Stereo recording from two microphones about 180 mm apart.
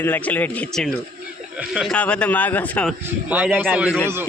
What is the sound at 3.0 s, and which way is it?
Speech, 10° right (ahead or behind).